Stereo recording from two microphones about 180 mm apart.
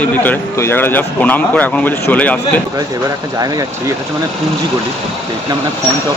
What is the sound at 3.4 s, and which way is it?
Speech, 20° right (ahead or behind).